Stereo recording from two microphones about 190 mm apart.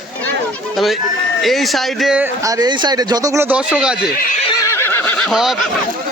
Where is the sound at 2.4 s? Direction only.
20° right (ahead or behind); by 4.1 s 5° right (ahead or behind).